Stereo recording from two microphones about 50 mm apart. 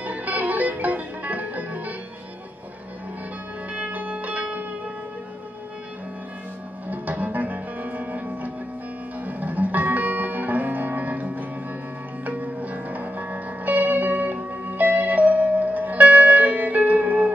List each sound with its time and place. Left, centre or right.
0.0 s music: right
3.7 s music: right
6.9 s music: right